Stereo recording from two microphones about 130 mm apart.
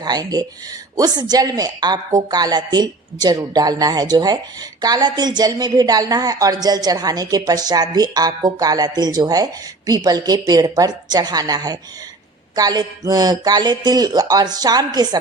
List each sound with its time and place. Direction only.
0.0 s a woman's voice: 30° right (ahead or behind)